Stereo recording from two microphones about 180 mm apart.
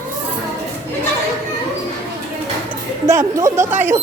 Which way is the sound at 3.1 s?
15° right (ahead or behind).